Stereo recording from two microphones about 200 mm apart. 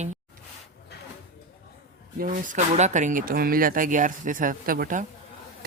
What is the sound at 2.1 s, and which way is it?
Speech, 45° right (ahead or behind).